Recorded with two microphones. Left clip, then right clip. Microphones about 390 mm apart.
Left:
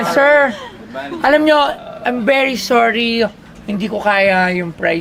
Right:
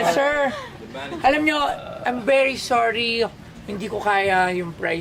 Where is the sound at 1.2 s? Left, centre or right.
Left.